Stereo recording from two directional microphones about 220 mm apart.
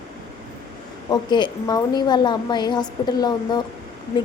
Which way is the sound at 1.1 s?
20° left (ahead or behind).